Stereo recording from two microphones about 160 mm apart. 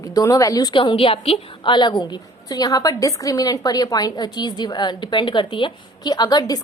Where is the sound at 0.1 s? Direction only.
20° left (ahead or behind).